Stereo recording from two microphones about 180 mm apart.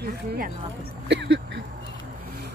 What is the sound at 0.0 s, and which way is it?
Speech, 60° right (ahead or behind).